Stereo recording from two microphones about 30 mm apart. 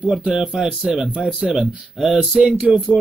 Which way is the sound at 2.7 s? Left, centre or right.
Centre.